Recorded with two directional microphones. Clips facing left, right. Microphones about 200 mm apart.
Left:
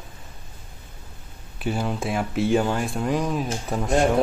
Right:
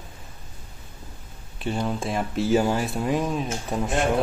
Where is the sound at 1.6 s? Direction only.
5° left (ahead or behind).